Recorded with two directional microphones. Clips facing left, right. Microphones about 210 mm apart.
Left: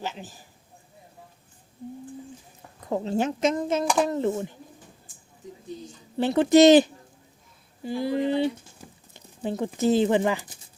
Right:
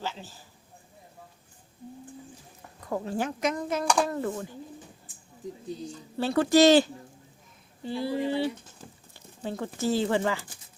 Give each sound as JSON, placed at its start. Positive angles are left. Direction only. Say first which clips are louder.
{"t": 0.0, "sound": "speech", "louder": "left 2 dB", "side_deg": 15}
{"t": 2.8, "sound": "speech", "louder": "left 5 dB", "side_deg": 25}
{"t": 6.1, "sound": "speech", "louder": "left 4 dB", "side_deg": 20}